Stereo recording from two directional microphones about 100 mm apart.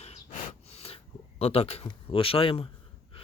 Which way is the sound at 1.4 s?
90° left.